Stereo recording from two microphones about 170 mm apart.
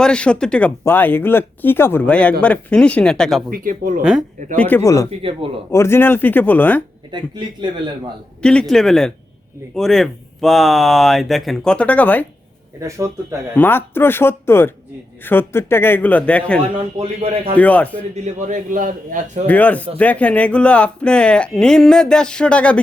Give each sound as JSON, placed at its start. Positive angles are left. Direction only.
{"t": 0.0, "sound": "speech", "side_deg": 5}
{"t": 3.5, "sound": "speech", "side_deg": -55}
{"t": 4.5, "sound": "speech", "side_deg": 10}
{"t": 7.1, "sound": "speech", "side_deg": -25}
{"t": 8.4, "sound": "speech", "side_deg": 5}
{"t": 13.6, "sound": "speech", "side_deg": 10}
{"t": 16.7, "sound": "a man's voice", "side_deg": -35}
{"t": 17.6, "sound": "speech", "side_deg": 10}
{"t": 18.1, "sound": "a man's voice", "side_deg": -45}
{"t": 19.5, "sound": "speech", "side_deg": 10}